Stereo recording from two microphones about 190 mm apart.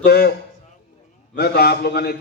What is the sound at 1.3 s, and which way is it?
Speech, 55° left (ahead or behind).